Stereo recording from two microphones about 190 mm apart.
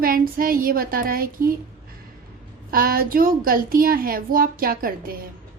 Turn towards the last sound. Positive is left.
turn(degrees=-50)  # may be behind; listen again after turning